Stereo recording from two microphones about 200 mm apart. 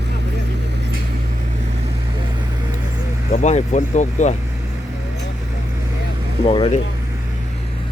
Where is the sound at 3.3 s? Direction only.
35° left (ahead or behind).